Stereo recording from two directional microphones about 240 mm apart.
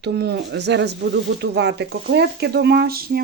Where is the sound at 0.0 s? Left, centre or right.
Right.